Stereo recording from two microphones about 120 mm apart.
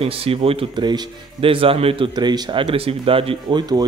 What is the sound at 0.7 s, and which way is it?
Speech, 35° right (ahead or behind).